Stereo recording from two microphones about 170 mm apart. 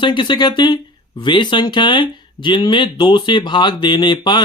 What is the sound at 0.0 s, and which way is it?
Speech, 25° left (ahead or behind).